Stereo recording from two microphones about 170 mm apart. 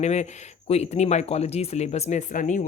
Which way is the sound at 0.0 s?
40° left (ahead or behind).